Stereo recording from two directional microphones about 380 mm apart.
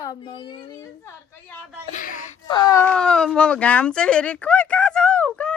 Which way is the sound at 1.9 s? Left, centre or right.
Centre.